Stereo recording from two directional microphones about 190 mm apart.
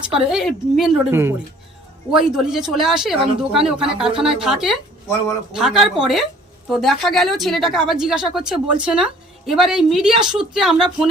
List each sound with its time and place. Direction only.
0.1 s a woman's voice: 5° right (ahead or behind)
1.1 s a woman's voice: 10° right (ahead or behind)